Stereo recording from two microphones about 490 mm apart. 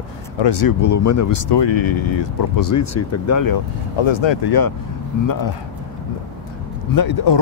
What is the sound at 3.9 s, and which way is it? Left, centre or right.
Speech, left.